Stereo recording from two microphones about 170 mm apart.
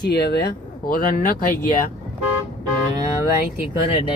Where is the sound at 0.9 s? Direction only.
60° left (ahead or behind).